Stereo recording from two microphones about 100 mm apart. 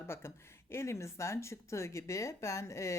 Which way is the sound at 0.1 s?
25° left (ahead or behind).